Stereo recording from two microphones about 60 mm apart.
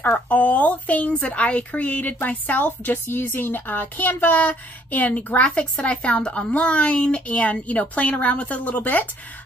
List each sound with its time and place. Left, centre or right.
0.0 s a woman's voice: left